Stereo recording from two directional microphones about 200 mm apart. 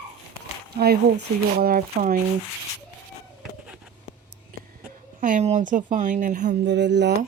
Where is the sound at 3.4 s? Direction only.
5° right (ahead or behind).